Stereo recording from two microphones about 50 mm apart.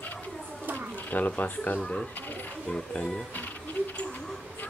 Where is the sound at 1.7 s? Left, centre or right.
Centre.